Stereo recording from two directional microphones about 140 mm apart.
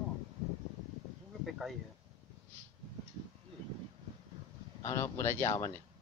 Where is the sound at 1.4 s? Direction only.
Centre (ahead or behind).